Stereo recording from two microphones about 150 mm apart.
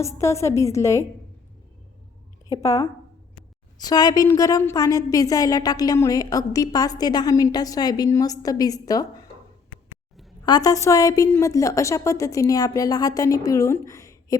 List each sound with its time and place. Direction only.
0.0 s a woman's voice: 20° left (ahead or behind)
2.5 s a woman's voice: 20° left (ahead or behind)
10.4 s a woman's voice: 25° left (ahead or behind)